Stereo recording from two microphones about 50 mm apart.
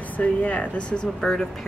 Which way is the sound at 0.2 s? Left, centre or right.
Left.